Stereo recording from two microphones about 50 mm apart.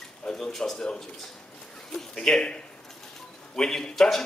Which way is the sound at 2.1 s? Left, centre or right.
Centre.